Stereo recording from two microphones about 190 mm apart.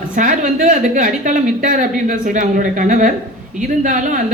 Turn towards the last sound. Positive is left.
turn(degrees=-45)  # may be behind; listen again after turning